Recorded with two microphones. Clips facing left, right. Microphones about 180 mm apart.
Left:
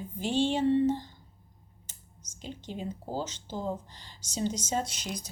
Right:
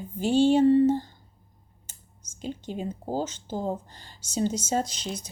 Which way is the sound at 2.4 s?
45° right (ahead or behind).